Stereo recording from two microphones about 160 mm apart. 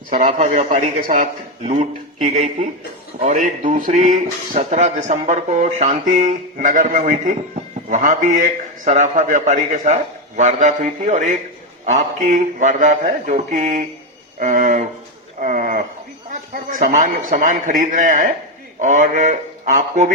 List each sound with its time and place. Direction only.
0.1 s speech: 50° right (ahead or behind)
15.4 s a sound: 55° right (ahead or behind)
16.3 s speech: 55° right (ahead or behind)